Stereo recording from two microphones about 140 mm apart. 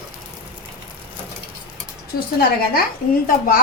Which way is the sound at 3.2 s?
90° left.